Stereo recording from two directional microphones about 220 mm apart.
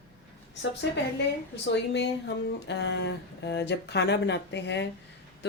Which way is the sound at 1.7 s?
50° left (ahead or behind).